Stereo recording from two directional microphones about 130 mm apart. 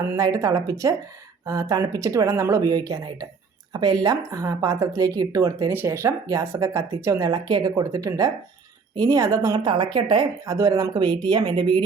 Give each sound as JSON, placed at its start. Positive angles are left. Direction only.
{"t": 0.1, "sound": "speech", "side_deg": -25}